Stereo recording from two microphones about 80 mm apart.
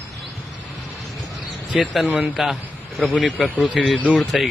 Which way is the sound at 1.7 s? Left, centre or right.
Centre.